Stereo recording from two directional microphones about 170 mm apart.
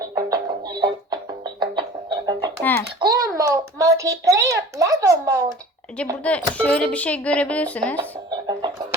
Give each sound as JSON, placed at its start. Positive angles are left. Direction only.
{"t": 0.0, "sound": "music", "side_deg": -20}
{"t": 3.0, "sound": "a child's voice", "side_deg": -20}
{"t": 6.2, "sound": "speech", "side_deg": 5}
{"t": 8.4, "sound": "chicken", "side_deg": -25}